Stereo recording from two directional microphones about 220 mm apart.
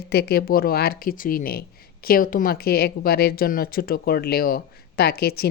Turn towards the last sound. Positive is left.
turn(degrees=45)  # may be behind; listen again after turning